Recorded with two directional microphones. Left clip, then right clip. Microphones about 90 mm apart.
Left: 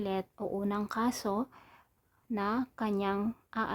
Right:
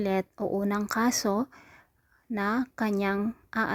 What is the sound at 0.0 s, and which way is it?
A woman's voice, 40° right (ahead or behind).